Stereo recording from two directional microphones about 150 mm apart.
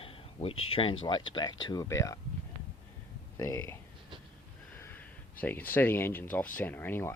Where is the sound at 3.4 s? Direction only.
20° left (ahead or behind).